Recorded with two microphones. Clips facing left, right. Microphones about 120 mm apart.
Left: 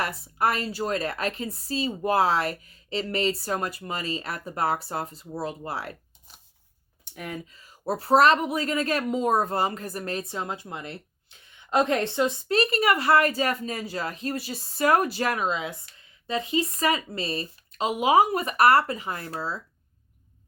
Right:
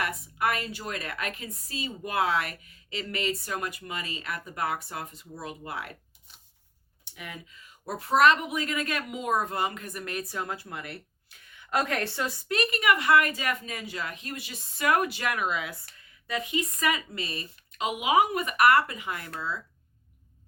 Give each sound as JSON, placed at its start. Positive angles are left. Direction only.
{"t": 0.0, "sound": "speech", "side_deg": 35}